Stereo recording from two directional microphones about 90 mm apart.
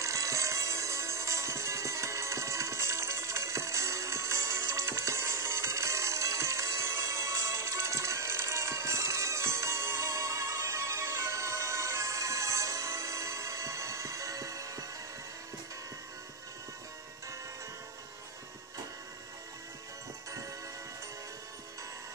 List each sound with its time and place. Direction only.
0.0 s music: 35° right (ahead or behind)